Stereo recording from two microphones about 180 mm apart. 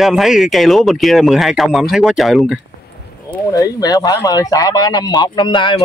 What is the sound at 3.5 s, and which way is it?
Speech, 20° left (ahead or behind).